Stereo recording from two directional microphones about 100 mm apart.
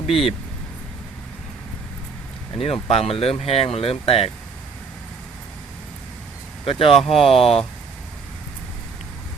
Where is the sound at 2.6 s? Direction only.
75° left (ahead or behind).